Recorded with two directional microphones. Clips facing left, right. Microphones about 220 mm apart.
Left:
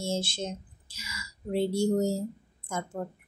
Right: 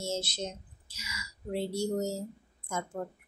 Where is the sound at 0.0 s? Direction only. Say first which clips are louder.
Left 3 dB; 30° left (ahead or behind).